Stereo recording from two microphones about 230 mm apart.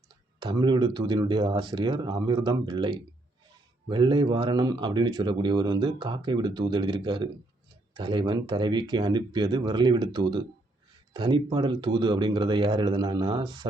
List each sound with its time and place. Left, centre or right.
0.3 s speech: centre